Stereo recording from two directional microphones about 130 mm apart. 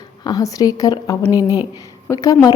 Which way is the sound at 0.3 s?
30° left (ahead or behind).